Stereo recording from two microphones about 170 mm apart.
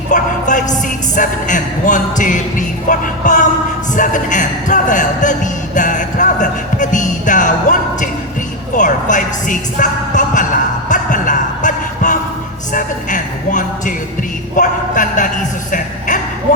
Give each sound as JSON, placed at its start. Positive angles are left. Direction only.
{"t": 0.1, "sound": "music", "side_deg": 45}
{"t": 1.1, "sound": "speech", "side_deg": 50}
{"t": 3.9, "sound": "a sound", "side_deg": 50}
{"t": 8.7, "sound": "speech", "side_deg": 50}
{"t": 10.8, "sound": "a sound", "side_deg": 50}
{"t": 12.7, "sound": "speech", "side_deg": 50}
{"t": 15.7, "sound": "music", "side_deg": 50}